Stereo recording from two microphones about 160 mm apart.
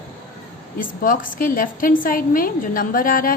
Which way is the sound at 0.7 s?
60° left (ahead or behind).